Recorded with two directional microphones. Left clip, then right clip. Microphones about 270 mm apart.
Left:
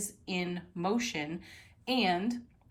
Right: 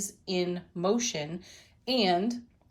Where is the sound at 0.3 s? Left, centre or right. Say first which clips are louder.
Right 5 dB; centre.